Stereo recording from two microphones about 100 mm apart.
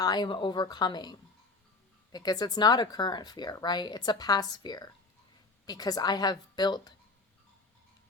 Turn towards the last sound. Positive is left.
turn(degrees=45)  # may be behind; listen again after turning